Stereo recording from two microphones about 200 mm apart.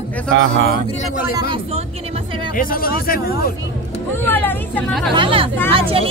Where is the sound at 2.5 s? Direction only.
45° left (ahead or behind).